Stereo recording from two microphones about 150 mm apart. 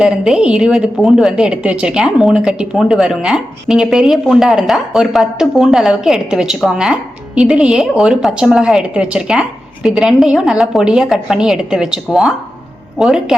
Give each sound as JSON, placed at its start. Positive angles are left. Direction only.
{"t": 0.0, "sound": "a woman's voice", "side_deg": -5}